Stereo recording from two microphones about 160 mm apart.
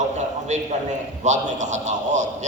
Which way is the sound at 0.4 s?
45° right (ahead or behind).